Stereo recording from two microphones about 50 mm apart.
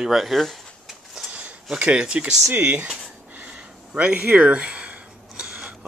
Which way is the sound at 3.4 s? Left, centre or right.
Right.